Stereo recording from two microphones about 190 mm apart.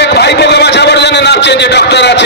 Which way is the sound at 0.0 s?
60° left (ahead or behind).